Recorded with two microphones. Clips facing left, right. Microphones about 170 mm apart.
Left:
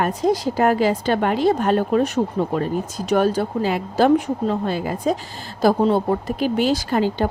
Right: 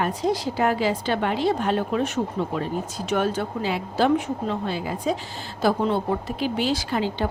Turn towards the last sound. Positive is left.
turn(degrees=45)  # may be behind; listen again after turning